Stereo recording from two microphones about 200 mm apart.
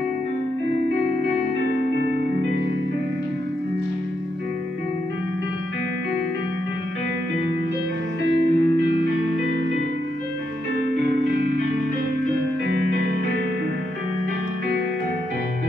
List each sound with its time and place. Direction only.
8.2 s music: 60° right (ahead or behind)